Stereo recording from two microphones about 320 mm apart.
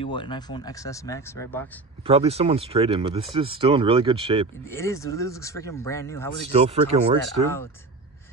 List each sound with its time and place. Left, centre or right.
0.0 s speech: centre
2.0 s speech: centre
4.6 s speech: centre
6.6 s speech: centre